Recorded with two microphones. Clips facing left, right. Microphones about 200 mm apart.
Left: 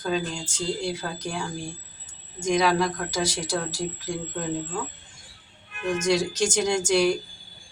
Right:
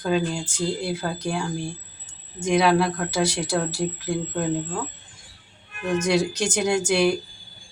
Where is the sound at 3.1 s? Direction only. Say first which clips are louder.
Right 4 dB; 60° right (ahead or behind).